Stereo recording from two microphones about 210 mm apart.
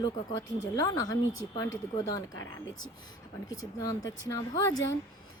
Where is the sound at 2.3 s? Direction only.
65° left (ahead or behind).